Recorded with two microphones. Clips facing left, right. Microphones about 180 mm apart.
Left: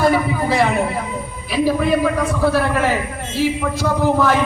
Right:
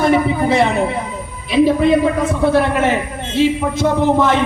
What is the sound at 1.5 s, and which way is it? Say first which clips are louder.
A man's voice: right 5 dB; 20° right (ahead or behind).